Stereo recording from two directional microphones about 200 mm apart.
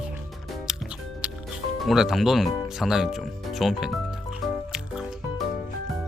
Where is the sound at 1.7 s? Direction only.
Centre (ahead or behind).